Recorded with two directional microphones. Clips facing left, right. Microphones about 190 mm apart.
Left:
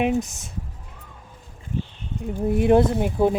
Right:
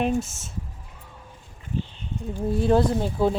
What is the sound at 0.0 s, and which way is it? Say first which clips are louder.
Speech: left 2 dB; 15° left (ahead or behind).